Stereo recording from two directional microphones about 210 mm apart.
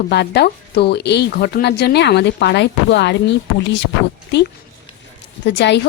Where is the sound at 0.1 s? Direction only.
50° left (ahead or behind).